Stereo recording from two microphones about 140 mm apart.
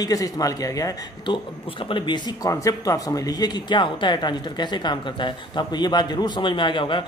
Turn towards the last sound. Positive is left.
turn(degrees=35)  # may be behind; listen again after turning